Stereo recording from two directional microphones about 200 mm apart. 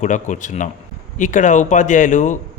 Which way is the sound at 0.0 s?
40° left (ahead or behind).